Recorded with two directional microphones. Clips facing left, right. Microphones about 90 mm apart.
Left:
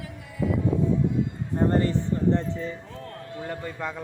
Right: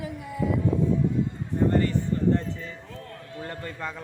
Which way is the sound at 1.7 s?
30° left (ahead or behind).